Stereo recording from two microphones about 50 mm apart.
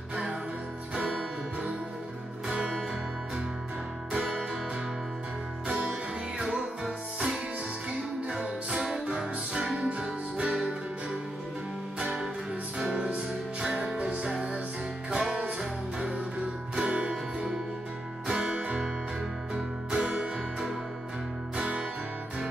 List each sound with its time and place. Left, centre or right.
0.1 s music: centre
2.4 s music: centre
4.1 s music: centre
5.7 s music: right
6.4 s music: centre
14.3 s music: centre
16.8 s music: centre
17.1 s music: centre
21.5 s music: right